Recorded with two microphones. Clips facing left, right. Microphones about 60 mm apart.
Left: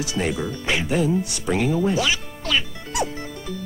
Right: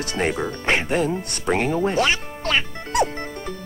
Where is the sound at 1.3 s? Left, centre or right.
Right.